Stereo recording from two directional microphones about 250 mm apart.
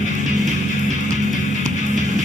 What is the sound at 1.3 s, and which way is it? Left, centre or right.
Music, left.